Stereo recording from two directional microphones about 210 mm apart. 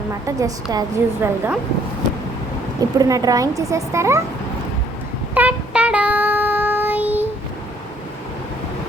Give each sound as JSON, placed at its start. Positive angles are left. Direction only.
{"t": 0.3, "sound": "a woman's voice", "side_deg": -15}
{"t": 3.0, "sound": "a woman's voice", "side_deg": -15}
{"t": 5.3, "sound": "child singing", "side_deg": -5}